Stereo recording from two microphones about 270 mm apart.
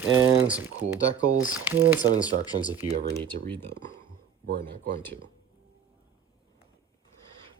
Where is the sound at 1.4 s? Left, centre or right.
Centre.